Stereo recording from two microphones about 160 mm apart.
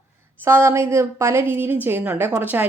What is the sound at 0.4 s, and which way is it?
A woman's voice, 15° right (ahead or behind).